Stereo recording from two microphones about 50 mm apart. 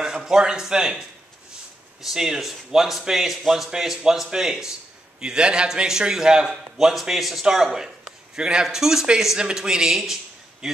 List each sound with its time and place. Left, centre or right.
0.0 s a man's voice: centre